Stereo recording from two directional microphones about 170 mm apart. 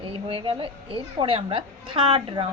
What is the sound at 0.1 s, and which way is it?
Speech, 30° right (ahead or behind).